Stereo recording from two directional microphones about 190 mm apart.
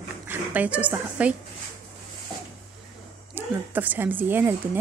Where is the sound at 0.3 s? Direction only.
10° right (ahead or behind).